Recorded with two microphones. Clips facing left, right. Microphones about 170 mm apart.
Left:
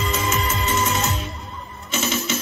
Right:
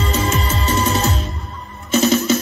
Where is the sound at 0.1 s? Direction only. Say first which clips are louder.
Right 4 dB; 35° right (ahead or behind).